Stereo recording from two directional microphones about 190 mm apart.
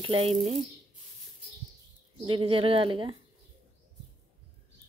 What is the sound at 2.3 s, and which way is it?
Sizzle, 30° right (ahead or behind).